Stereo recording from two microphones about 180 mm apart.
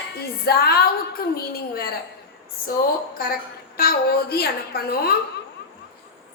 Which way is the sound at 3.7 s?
60° left (ahead or behind).